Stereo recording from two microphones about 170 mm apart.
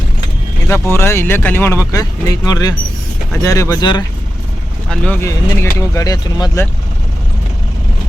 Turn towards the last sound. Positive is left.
turn(degrees=20)  # may be behind; listen again after turning